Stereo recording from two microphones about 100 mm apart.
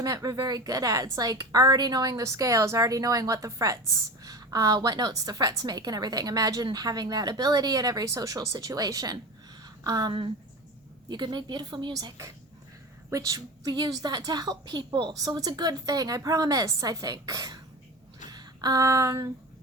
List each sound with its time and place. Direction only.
0.0 s a woman's voice: 40° right (ahead or behind)
11.1 s a woman's voice: 45° right (ahead or behind)